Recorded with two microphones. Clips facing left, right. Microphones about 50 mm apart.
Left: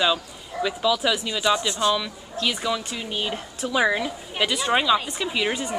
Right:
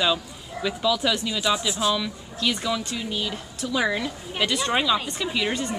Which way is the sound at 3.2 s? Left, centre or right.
Left.